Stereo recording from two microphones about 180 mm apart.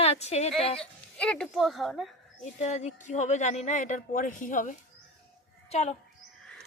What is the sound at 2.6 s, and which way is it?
A woman's voice, 40° left (ahead or behind).